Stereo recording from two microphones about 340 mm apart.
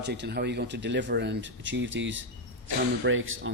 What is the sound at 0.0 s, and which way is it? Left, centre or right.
Speech, right.